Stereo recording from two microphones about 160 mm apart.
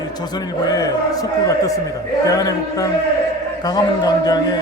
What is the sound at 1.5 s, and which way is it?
Music, 20° left (ahead or behind).